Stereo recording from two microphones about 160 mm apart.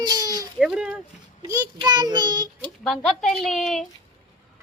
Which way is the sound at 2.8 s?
Centre (ahead or behind).